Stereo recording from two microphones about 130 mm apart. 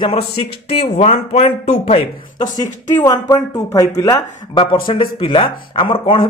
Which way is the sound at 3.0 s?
25° left (ahead or behind).